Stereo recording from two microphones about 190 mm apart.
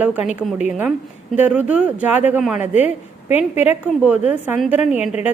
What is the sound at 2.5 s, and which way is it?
Speech, 35° left (ahead or behind).